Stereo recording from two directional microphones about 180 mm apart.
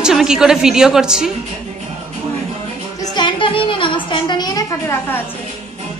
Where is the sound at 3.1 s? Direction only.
25° left (ahead or behind).